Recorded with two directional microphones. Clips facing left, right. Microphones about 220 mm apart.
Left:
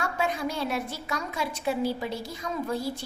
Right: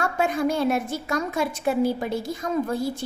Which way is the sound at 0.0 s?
50° right (ahead or behind).